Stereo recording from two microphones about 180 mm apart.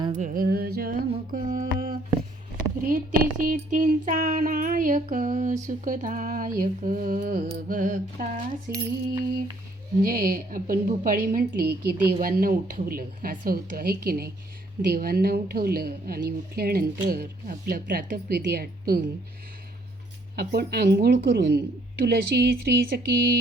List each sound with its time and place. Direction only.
0.2 s mantra: 55° right (ahead or behind)
2.8 s child singing: 50° right (ahead or behind)
10.0 s child singing: 55° right (ahead or behind)
14.8 s a woman's voice: 55° right (ahead or behind)
20.3 s a woman's voice: 65° right (ahead or behind)